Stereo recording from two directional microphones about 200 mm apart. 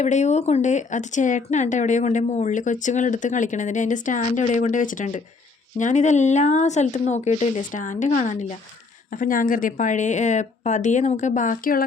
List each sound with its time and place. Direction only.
0.0 s speech: 35° left (ahead or behind)